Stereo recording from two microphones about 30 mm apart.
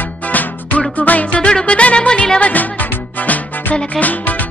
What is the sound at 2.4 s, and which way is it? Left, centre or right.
Music, left.